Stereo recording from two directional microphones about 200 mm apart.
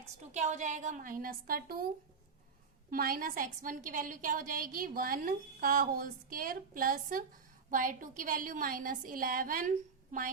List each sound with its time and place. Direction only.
0.3 s a woman's voice: 35° right (ahead or behind)
2.9 s a woman's voice: 45° right (ahead or behind)